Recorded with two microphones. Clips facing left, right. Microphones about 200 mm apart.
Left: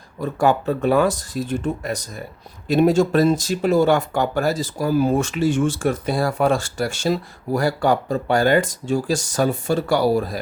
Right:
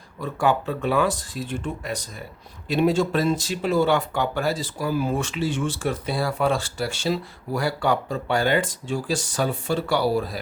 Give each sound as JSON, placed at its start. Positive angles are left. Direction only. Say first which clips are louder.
{"t": 0.2, "sound": "speech", "louder": "left 4 dB", "side_deg": 45}